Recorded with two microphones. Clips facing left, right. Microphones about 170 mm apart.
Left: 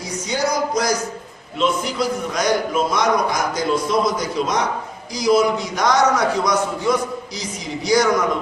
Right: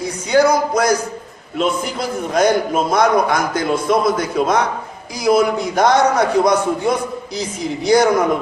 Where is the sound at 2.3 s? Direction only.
55° right (ahead or behind).